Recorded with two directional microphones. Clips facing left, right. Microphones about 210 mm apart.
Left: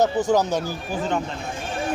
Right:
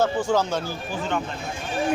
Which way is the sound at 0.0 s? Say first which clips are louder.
Left 2 dB; 15° left (ahead or behind).